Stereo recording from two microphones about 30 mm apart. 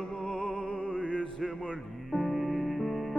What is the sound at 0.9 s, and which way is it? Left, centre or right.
Music, left.